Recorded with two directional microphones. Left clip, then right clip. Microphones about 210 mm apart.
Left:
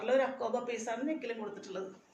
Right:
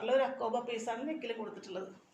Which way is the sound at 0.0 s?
5° left (ahead or behind).